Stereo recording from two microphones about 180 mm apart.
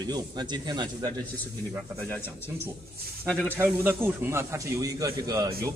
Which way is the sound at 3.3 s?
5° left (ahead or behind).